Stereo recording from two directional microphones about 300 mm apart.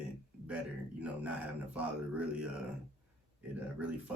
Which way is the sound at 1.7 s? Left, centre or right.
Centre.